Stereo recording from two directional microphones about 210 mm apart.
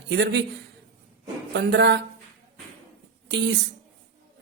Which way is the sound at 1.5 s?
55° right (ahead or behind).